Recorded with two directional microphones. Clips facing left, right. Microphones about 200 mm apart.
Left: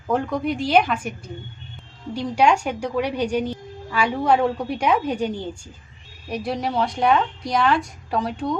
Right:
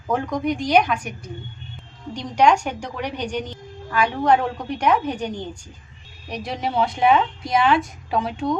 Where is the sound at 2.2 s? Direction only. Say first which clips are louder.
Right 1 dB; 10° left (ahead or behind).